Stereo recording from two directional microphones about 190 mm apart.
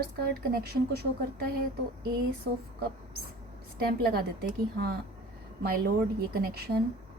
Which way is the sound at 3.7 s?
55° right (ahead or behind).